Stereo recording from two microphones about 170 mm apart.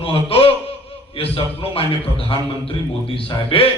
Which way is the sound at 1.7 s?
30° left (ahead or behind).